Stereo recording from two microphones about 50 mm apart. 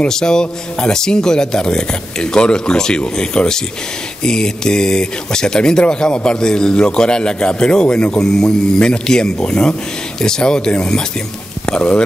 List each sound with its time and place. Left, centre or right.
0.1 s speech: centre